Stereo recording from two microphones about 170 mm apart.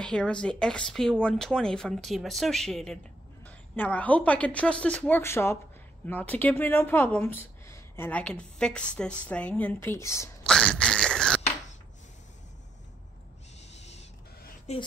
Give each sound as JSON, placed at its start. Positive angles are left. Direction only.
{"t": 0.0, "sound": "speech", "side_deg": 5}
{"t": 10.4, "sound": "a sound", "side_deg": 5}
{"t": 13.6, "sound": "owl", "side_deg": 40}
{"t": 14.7, "sound": "speech", "side_deg": 40}